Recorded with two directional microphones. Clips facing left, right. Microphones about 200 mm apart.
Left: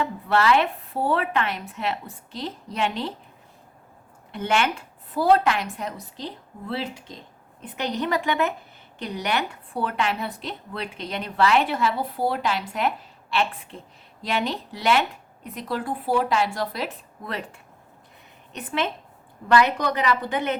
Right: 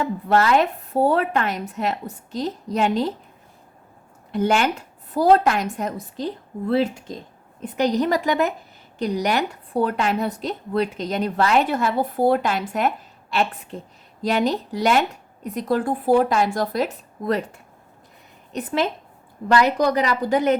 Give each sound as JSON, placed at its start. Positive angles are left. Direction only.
{"t": 0.0, "sound": "a woman's voice", "side_deg": -40}
{"t": 4.3, "sound": "a woman's voice", "side_deg": -40}